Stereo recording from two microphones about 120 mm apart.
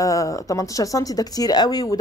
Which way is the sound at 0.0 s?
30° left (ahead or behind).